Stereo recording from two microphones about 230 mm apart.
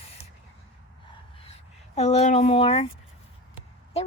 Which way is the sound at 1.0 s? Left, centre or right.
Left.